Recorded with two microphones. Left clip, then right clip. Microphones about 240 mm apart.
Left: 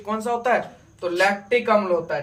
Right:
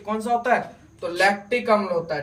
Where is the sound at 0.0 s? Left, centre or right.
Centre.